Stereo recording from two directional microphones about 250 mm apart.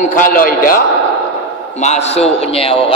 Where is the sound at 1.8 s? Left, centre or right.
Left.